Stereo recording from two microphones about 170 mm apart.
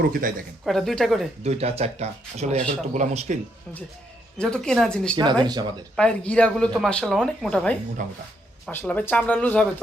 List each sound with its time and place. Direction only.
0.0 s speech: 55° right (ahead or behind)
0.6 s speech: centre (ahead or behind)
1.5 s speech: 35° right (ahead or behind)
4.4 s speech: 5° left (ahead or behind)
5.1 s speech: 25° right (ahead or behind)
6.0 s speech: 5° left (ahead or behind)